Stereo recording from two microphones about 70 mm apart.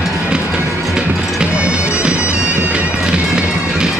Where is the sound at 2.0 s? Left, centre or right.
Centre.